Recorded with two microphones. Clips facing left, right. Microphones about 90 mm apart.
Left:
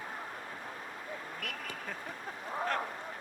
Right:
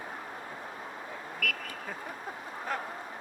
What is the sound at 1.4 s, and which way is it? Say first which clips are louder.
Vehicle: right 10 dB; 25° left (ahead or behind).